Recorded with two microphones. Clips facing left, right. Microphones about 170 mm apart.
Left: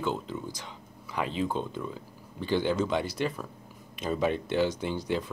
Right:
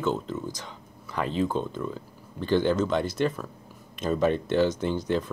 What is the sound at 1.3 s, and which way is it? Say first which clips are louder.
Speech: right 6 dB; 45° right (ahead or behind).